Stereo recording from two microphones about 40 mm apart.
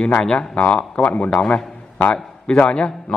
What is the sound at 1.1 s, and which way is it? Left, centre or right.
Speech, left.